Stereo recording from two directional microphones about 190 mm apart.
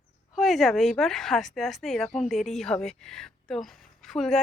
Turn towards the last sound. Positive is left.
turn(degrees=0)  # may be behind; listen again after turning